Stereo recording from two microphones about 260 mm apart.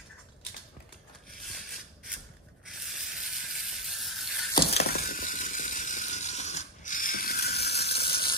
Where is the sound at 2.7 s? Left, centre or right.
Centre.